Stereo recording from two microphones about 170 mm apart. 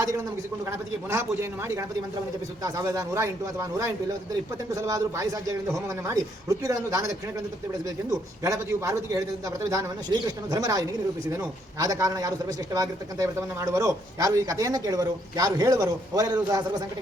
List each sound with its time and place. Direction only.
1.1 s a man's voice: 15° right (ahead or behind)
8.4 s a man's voice: 20° right (ahead or behind)